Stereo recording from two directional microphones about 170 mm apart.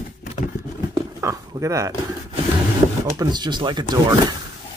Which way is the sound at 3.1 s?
25° right (ahead or behind).